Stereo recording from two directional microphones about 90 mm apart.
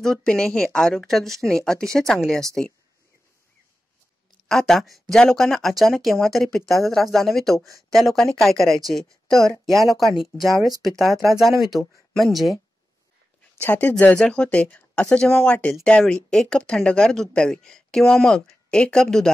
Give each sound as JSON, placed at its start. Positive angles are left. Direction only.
{"t": 0.0, "sound": "speech", "side_deg": 5}
{"t": 4.5, "sound": "speech", "side_deg": 5}
{"t": 13.7, "sound": "speech", "side_deg": 15}